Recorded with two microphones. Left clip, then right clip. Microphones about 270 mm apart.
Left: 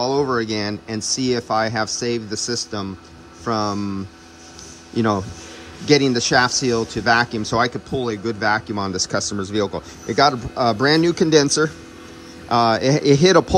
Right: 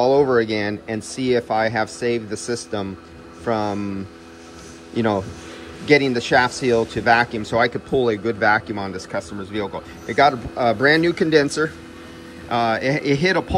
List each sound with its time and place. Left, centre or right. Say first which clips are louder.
0.0 s speech: right 4 dB; centre
4.9 s a man's voice: even; centre
12.4 s speech: left 3 dB; centre